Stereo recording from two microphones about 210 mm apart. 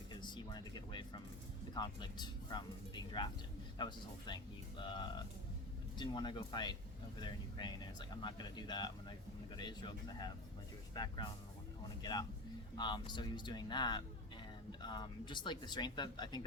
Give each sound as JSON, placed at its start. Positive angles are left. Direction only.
{"t": 0.1, "sound": "speech", "side_deg": 20}
{"t": 12.7, "sound": "speech", "side_deg": 20}